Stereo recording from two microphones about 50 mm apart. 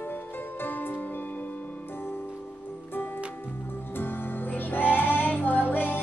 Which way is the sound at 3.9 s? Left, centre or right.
Left.